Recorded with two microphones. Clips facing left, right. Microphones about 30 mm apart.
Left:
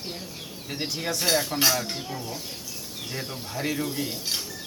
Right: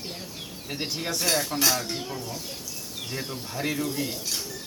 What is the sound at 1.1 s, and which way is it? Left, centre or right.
Speech, centre.